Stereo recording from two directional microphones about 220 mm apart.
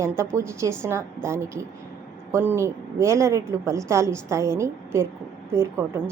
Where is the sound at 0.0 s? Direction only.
10° right (ahead or behind).